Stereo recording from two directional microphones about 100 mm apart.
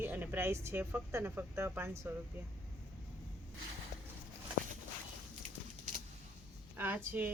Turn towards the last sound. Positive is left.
turn(degrees=-15)  # may be behind; listen again after turning